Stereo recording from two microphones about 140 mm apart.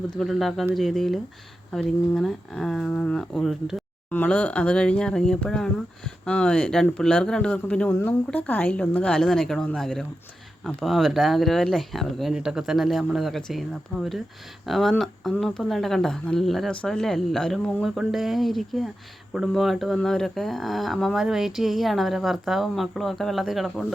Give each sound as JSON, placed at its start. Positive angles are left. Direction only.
{"t": 0.2, "sound": "speech", "side_deg": 0}
{"t": 4.1, "sound": "speech", "side_deg": 10}